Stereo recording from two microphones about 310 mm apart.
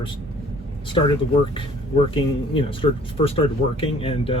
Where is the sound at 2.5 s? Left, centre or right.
Centre.